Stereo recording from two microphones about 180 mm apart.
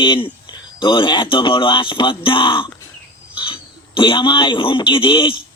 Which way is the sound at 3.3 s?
25° left (ahead or behind).